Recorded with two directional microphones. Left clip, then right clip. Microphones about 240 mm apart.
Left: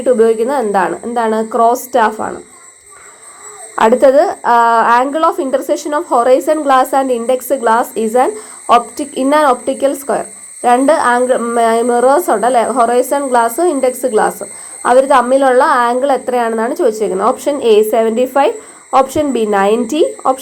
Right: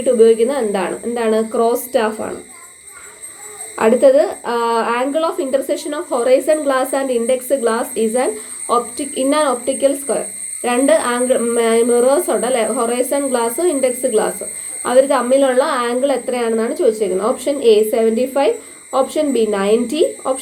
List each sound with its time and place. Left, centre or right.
0.0 s a woman's voice: left
4.1 s a woman's voice: left